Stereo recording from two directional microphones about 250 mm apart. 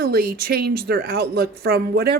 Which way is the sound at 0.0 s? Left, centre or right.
Right.